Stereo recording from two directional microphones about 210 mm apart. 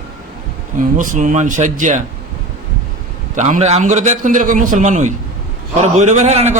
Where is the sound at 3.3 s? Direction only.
35° right (ahead or behind).